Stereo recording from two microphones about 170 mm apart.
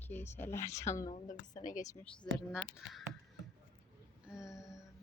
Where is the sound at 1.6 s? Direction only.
50° left (ahead or behind).